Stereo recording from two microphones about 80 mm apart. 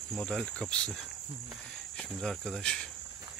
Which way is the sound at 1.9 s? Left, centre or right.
Centre.